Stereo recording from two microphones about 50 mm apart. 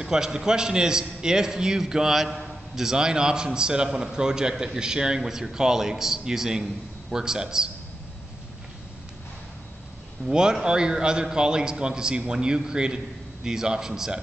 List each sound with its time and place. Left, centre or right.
0.0 s a man's voice: centre
10.3 s a man's voice: centre